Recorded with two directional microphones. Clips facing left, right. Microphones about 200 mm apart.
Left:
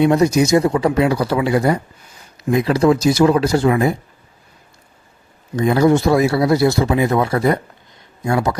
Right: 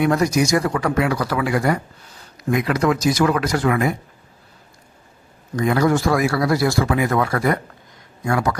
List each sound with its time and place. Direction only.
0.0 s speech: 25° left (ahead or behind)
5.5 s speech: 25° left (ahead or behind)